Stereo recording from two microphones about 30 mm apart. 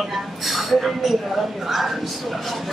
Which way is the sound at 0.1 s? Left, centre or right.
Centre.